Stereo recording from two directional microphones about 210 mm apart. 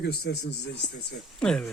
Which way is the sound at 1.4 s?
5° left (ahead or behind).